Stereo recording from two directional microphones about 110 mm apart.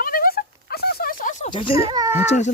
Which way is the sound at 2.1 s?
90° left.